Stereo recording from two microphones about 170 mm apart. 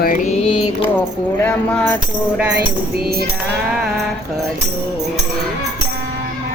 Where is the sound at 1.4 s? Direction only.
5° left (ahead or behind).